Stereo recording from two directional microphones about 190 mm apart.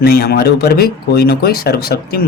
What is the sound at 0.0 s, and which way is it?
Speech, 55° left (ahead or behind).